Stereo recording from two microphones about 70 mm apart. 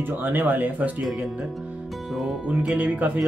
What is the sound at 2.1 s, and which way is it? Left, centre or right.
Music, centre.